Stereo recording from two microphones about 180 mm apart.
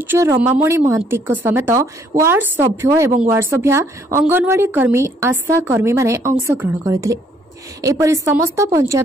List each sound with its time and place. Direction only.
0.0 s speech: 15° right (ahead or behind)